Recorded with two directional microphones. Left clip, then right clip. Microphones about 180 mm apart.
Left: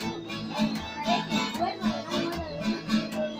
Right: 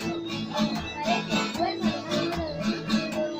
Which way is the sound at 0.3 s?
35° right (ahead or behind).